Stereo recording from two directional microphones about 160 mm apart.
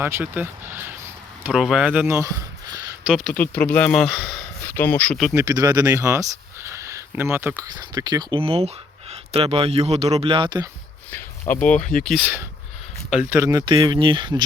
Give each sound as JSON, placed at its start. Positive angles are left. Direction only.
{"t": 0.0, "sound": "speech", "side_deg": -15}
{"t": 1.5, "sound": "speech", "side_deg": 0}
{"t": 3.2, "sound": "speech", "side_deg": 10}
{"t": 4.0, "sound": "speech", "side_deg": 0}
{"t": 4.6, "sound": "speech", "side_deg": 10}
{"t": 5.3, "sound": "speech", "side_deg": -20}
{"t": 7.6, "sound": "speech", "side_deg": -25}
{"t": 11.1, "sound": "a sound", "side_deg": 10}
{"t": 12.0, "sound": "speech", "side_deg": -5}
{"t": 13.3, "sound": "speech", "side_deg": -20}